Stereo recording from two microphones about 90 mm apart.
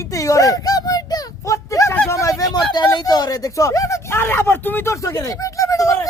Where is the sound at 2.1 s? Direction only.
35° left (ahead or behind).